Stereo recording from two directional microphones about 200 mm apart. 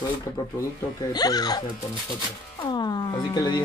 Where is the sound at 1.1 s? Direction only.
20° left (ahead or behind).